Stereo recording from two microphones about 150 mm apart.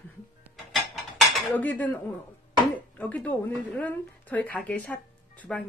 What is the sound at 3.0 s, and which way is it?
A woman's voice, 10° left (ahead or behind).